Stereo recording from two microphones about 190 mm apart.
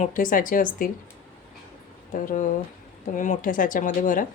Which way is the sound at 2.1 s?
45° left (ahead or behind).